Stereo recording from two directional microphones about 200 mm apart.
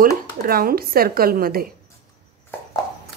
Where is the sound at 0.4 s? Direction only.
50° right (ahead or behind).